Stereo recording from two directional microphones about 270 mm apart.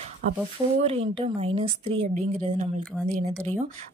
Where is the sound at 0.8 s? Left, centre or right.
Right.